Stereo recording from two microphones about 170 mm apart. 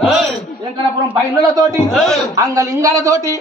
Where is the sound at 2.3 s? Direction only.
20° right (ahead or behind).